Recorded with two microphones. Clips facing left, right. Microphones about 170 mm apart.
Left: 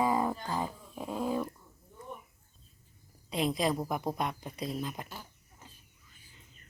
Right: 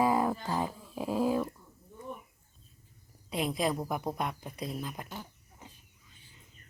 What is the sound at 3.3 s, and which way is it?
Speech, 5° right (ahead or behind).